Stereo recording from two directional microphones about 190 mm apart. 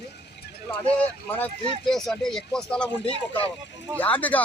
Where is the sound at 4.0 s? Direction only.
10° left (ahead or behind).